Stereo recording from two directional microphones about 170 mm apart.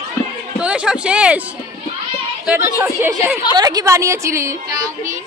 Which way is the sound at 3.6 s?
25° right (ahead or behind).